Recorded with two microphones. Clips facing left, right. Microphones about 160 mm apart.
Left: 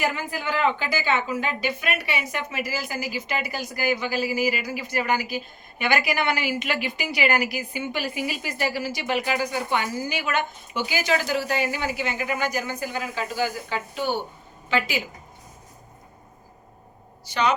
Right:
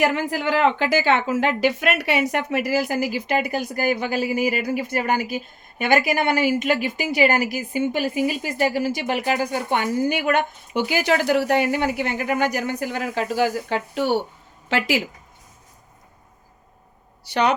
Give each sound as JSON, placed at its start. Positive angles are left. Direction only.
{"t": 0.0, "sound": "a woman's voice", "side_deg": -70}
{"t": 17.2, "sound": "a woman's voice", "side_deg": -65}